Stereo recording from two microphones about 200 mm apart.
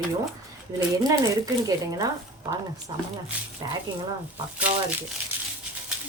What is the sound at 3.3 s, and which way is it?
Speech, 5° right (ahead or behind).